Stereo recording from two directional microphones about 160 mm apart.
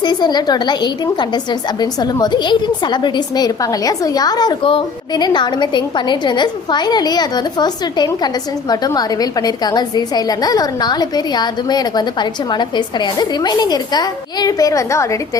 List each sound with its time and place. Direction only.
0.0 s a woman's voice: 25° left (ahead or behind)